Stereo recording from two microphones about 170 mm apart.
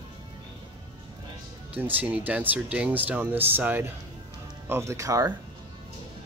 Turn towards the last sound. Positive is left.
turn(degrees=-20)  # may be behind; listen again after turning